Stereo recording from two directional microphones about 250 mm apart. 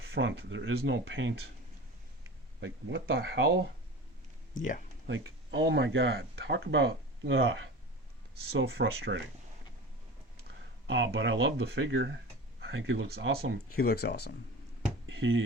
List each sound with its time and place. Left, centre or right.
0.1 s speech: right
2.6 s speech: right
5.0 s speech: right
10.8 s speech: right
13.7 s speech: left
15.0 s a sound: right